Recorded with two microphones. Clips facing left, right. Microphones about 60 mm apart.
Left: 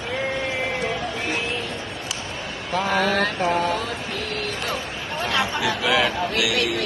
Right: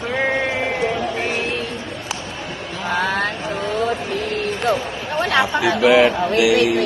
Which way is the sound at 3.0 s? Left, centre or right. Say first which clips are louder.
Right 3 dB; right.